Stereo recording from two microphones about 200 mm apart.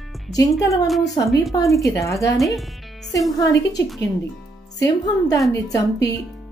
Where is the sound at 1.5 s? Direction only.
15° left (ahead or behind).